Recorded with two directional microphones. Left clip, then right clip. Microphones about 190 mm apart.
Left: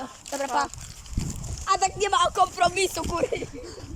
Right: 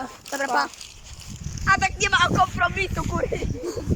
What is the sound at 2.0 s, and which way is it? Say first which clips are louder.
Speech: right 2 dB; 40° left (ahead or behind).